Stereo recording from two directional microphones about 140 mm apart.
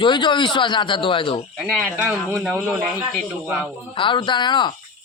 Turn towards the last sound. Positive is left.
turn(degrees=35)  # may be behind; listen again after turning